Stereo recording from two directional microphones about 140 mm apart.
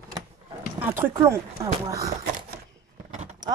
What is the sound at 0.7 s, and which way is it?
Speech, 15° right (ahead or behind).